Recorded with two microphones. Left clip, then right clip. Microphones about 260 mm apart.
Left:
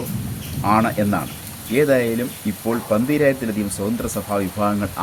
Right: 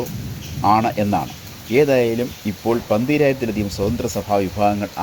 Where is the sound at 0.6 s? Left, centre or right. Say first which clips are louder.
Right 2 dB; right.